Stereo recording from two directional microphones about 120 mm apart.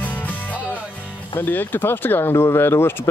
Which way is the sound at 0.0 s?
15° left (ahead or behind).